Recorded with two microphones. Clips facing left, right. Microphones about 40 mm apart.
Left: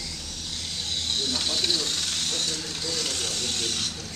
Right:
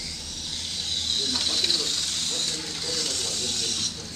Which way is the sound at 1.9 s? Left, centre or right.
Centre.